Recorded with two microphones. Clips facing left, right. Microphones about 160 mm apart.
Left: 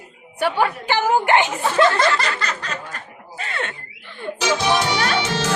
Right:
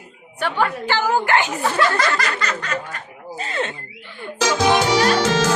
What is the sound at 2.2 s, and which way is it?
Snicker, 35° left (ahead or behind).